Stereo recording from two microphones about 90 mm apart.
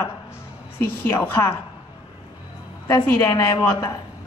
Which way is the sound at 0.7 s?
25° left (ahead or behind).